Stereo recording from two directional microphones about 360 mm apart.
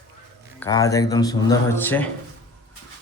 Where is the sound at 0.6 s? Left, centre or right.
Centre.